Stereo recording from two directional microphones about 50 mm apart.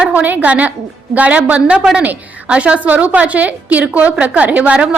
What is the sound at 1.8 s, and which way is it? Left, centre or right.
A woman's voice, centre.